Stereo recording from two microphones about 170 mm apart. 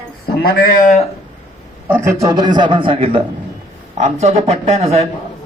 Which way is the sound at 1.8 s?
15° right (ahead or behind).